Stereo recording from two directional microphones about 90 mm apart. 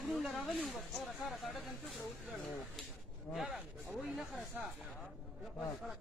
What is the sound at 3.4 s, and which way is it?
Speech, centre (ahead or behind).